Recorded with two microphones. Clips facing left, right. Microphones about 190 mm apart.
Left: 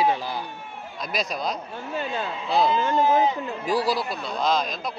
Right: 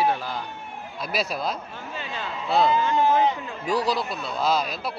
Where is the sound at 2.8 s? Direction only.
45° left (ahead or behind).